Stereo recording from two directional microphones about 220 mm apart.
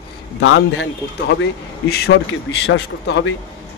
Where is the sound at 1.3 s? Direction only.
50° left (ahead or behind).